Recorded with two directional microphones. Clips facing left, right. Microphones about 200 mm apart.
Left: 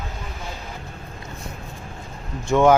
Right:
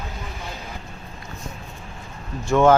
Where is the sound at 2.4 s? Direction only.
15° left (ahead or behind).